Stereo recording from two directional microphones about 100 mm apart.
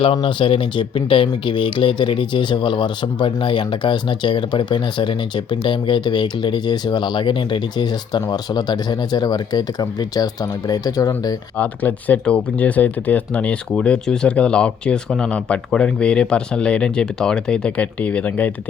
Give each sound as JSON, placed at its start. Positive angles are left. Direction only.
{"t": 0.0, "sound": "speech", "side_deg": 55}
{"t": 11.5, "sound": "speech", "side_deg": 15}